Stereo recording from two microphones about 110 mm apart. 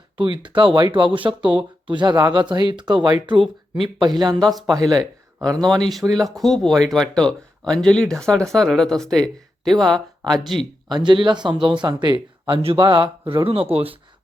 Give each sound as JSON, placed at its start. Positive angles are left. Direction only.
{"t": 0.2, "sound": "speech", "side_deg": -50}
{"t": 5.7, "sound": "speech", "side_deg": 0}
{"t": 10.8, "sound": "speech", "side_deg": -45}